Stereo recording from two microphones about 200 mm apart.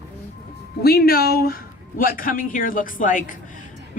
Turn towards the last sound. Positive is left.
turn(degrees=40)  # may be behind; listen again after turning